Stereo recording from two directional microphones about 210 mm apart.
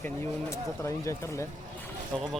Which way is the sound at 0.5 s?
15° left (ahead or behind).